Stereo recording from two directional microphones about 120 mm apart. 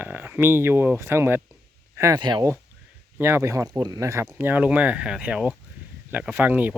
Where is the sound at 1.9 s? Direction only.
25° right (ahead or behind).